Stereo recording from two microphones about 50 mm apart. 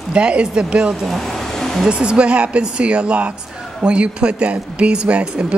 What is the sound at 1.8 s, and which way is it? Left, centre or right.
Speech, centre.